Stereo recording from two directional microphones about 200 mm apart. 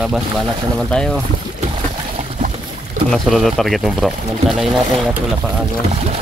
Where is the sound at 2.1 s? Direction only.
35° right (ahead or behind).